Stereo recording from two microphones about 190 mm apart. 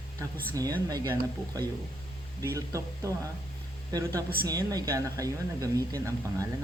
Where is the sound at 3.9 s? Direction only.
20° right (ahead or behind).